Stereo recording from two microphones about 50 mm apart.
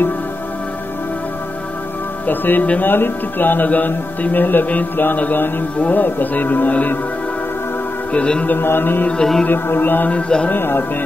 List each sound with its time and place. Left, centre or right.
2.2 s speech: left
8.1 s speech: left
8.5 s music: left
9.1 s music: centre
9.5 s speech: left
10.0 s speech: left
10.5 s music: left